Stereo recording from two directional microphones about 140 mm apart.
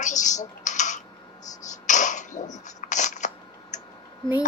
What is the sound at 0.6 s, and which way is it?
Typing, 60° left (ahead or behind).